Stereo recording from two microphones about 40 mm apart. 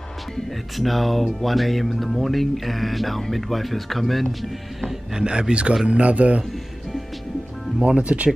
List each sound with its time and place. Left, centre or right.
0.7 s speech: centre
5.1 s speech: right
7.8 s speech: right